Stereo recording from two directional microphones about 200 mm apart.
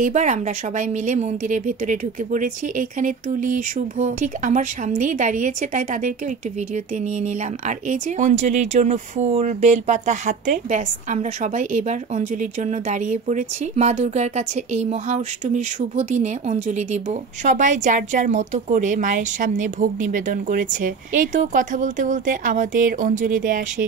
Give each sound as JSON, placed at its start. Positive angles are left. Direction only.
{"t": 0.0, "sound": "speech", "side_deg": -40}